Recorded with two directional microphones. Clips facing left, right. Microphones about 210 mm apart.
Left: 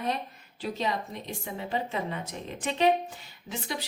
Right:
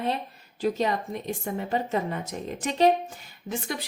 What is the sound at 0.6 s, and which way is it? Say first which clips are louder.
A woman's voice: right 5 dB; 45° right (ahead or behind).